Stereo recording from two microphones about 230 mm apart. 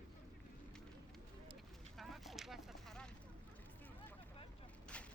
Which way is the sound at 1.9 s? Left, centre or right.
Centre.